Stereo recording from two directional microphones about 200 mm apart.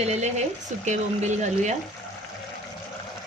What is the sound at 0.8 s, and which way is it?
Speech, 35° right (ahead or behind).